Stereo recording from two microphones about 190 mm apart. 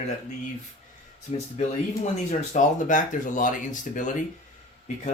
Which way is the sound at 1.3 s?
35° left (ahead or behind).